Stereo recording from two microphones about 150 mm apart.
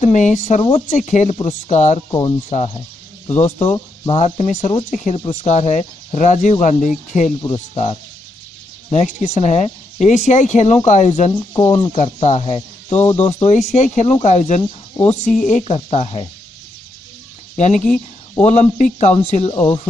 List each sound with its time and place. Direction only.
0.0 s speech: 55° left (ahead or behind)
0.6 s speech: 35° left (ahead or behind)
0.8 s speech: 55° left (ahead or behind)
2.0 s speech: 25° left (ahead or behind)
2.5 s speech: 40° left (ahead or behind)
11.5 s speech: 30° left (ahead or behind)
18.4 s speech: 50° left (ahead or behind)